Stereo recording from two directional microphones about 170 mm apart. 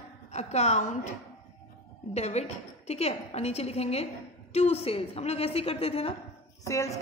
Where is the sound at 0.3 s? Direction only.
40° left (ahead or behind).